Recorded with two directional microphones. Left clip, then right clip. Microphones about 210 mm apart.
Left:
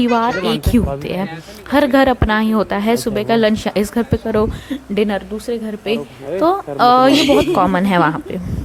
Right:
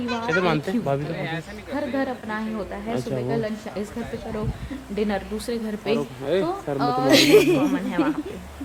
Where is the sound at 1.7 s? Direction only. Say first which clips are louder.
Left 14 dB; 40° left (ahead or behind).